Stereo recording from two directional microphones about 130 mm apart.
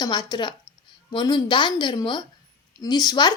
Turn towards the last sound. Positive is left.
turn(degrees=35)  # may be behind; listen again after turning